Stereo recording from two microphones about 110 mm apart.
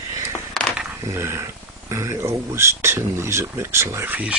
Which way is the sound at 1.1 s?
25° right (ahead or behind).